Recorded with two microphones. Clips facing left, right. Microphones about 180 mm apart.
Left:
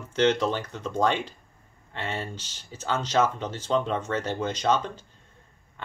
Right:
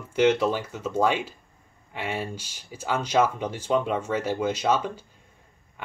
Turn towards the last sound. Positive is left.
turn(degrees=-10)  # may be behind; listen again after turning